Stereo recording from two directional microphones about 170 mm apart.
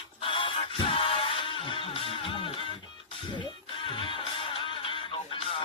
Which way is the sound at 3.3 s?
30° left (ahead or behind).